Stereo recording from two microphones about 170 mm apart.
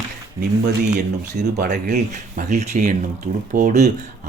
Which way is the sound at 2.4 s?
45° right (ahead or behind).